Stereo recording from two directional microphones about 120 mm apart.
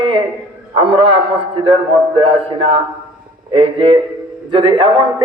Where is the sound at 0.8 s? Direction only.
50° right (ahead or behind).